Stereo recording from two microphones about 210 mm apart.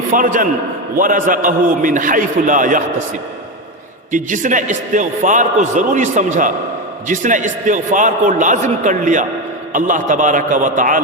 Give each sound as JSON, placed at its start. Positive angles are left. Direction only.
{"t": 0.1, "sound": "a man's voice", "side_deg": -40}
{"t": 4.1, "sound": "a man's voice", "side_deg": -35}